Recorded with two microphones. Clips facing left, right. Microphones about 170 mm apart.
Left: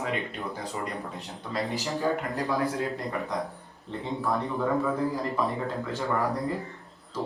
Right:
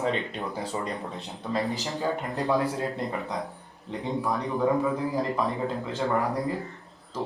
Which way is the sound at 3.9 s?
15° right (ahead or behind).